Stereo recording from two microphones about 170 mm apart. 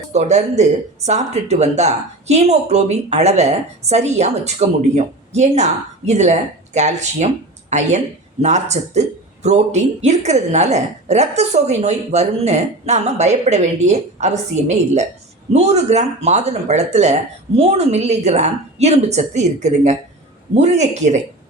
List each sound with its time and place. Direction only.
0.1 s a man's voice: 40° right (ahead or behind)